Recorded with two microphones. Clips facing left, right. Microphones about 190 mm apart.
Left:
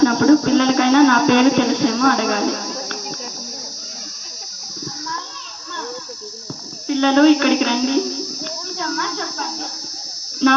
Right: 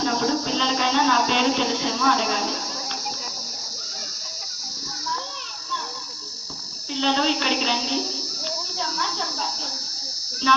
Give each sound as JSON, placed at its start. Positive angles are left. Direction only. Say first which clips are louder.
{"t": 0.0, "sound": "speech", "louder": "left 11 dB", "side_deg": 60}
{"t": 6.8, "sound": "speech", "louder": "left 11 dB", "side_deg": 60}
{"t": 8.8, "sound": "cricket", "louder": "left 6 dB", "side_deg": 60}
{"t": 10.4, "sound": "speech", "louder": "left 8 dB", "side_deg": 60}